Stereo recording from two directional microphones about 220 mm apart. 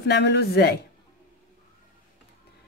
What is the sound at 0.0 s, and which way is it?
Speech, 50° left (ahead or behind).